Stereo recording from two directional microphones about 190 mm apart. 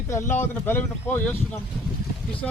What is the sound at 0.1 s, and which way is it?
Speech, 15° left (ahead or behind).